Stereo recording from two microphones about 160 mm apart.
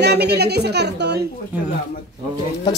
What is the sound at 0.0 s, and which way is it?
A woman's voice, 90° right.